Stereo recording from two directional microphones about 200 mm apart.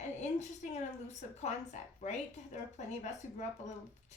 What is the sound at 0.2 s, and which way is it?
A woman's voice, 35° left (ahead or behind).